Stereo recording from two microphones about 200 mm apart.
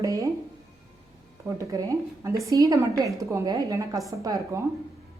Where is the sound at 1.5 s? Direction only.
15° right (ahead or behind).